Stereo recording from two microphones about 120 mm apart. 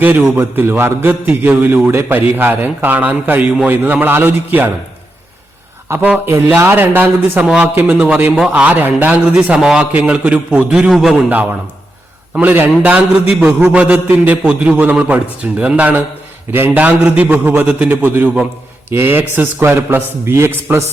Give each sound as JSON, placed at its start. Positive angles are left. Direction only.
{"t": 0.0, "sound": "speech", "side_deg": -15}
{"t": 5.9, "sound": "speech", "side_deg": -15}
{"t": 12.3, "sound": "a man's voice", "side_deg": -15}